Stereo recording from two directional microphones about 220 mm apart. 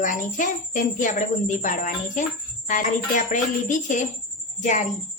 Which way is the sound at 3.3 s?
35° left (ahead or behind).